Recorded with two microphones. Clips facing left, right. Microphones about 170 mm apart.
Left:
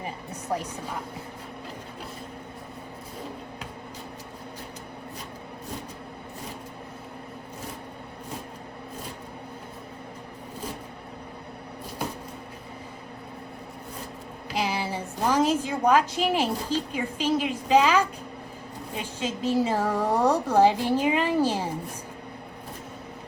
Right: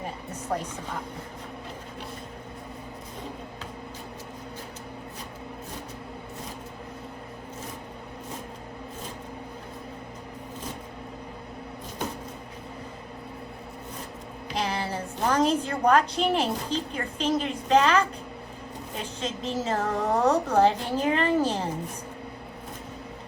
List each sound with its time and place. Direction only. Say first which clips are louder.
0.5 s a woman's voice: even; 5° left (ahead or behind)
14.5 s a woman's voice: left 1 dB; 5° left (ahead or behind)
19.2 s a woman's voice: left 6 dB; 10° left (ahead or behind)